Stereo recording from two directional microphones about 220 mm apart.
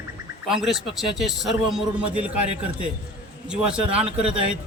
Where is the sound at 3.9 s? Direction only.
25° right (ahead or behind).